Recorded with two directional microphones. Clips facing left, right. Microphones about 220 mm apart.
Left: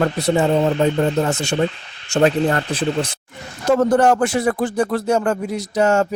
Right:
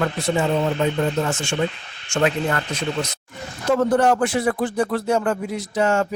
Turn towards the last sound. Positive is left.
turn(degrees=40)  # may be behind; listen again after turning